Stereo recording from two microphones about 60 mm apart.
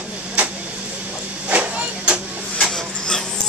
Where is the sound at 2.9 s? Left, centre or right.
Centre.